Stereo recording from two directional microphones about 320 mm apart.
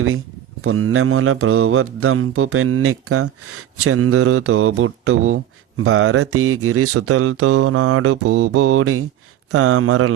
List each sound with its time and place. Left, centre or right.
0.6 s mantra: right